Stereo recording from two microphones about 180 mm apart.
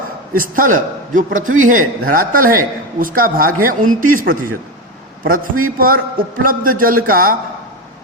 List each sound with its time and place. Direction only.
0.3 s a man's voice: 50° right (ahead or behind)